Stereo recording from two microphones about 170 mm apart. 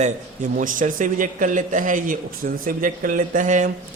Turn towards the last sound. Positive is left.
turn(degrees=-50)  # may be behind; listen again after turning